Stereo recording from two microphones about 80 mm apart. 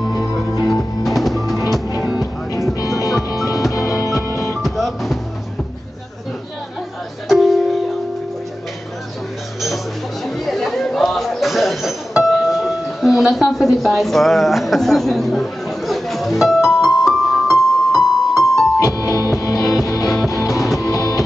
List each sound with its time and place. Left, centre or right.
0.7 s music: centre
2.1 s music: left
4.6 s music: centre
7.2 s music: centre
10.2 s chatter: centre
19.0 s music: left
20.4 s music: centre
20.8 s music: left